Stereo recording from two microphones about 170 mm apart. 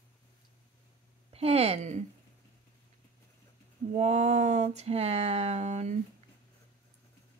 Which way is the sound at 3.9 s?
40° right (ahead or behind).